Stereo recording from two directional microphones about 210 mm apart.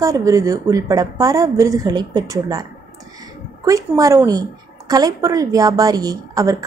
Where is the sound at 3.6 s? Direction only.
15° right (ahead or behind).